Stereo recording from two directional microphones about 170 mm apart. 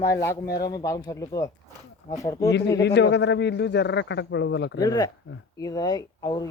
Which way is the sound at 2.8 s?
85° left.